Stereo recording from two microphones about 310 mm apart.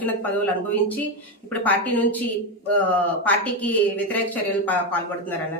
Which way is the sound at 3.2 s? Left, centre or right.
Centre.